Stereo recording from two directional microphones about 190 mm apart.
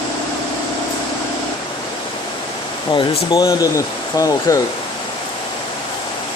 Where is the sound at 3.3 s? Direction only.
20° left (ahead or behind).